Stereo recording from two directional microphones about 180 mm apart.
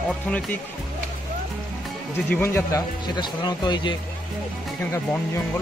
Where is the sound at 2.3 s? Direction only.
10° left (ahead or behind).